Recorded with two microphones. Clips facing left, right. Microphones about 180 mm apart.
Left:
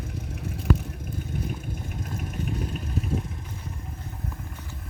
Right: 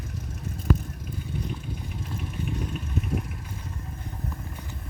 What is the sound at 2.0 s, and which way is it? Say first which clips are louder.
Vehicle: left 1 dB; 45° left (ahead or behind).